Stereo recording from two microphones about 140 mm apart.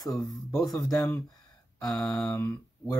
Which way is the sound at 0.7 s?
20° left (ahead or behind).